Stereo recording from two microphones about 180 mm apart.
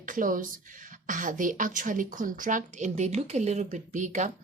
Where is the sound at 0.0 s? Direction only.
50° right (ahead or behind).